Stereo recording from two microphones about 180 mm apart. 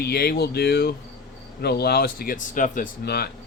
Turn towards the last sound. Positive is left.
turn(degrees=55)  # may be behind; listen again after turning